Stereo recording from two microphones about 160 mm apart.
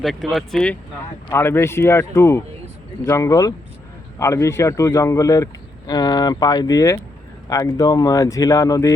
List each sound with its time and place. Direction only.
0.0 s speech: centre (ahead or behind); by 8.9 s 20° left (ahead or behind)